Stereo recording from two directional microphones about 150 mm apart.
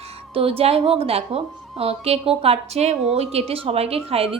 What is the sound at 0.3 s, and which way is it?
A woman's voice, 40° right (ahead or behind).